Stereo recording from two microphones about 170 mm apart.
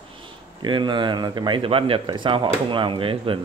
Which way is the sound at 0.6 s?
25° right (ahead or behind).